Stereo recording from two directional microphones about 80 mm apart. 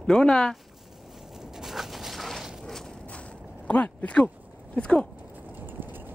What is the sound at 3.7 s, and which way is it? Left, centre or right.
Speech, centre.